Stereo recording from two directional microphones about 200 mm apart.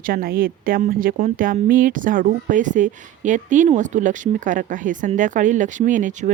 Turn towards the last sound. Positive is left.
turn(degrees=-40)  # may be behind; listen again after turning